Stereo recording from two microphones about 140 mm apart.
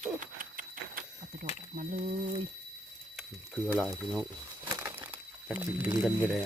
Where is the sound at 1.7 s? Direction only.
65° right (ahead or behind).